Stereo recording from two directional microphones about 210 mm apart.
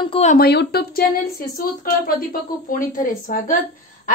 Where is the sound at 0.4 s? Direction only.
50° left (ahead or behind).